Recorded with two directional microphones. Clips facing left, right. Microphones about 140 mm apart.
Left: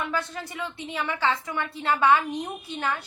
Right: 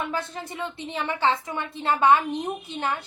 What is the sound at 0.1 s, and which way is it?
Speech, 25° right (ahead or behind).